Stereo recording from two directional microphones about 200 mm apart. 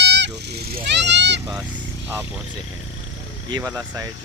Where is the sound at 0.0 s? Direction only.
60° right (ahead or behind).